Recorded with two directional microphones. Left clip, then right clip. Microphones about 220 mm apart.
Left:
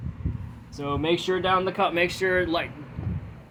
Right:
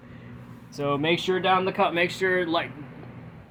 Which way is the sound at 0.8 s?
15° right (ahead or behind).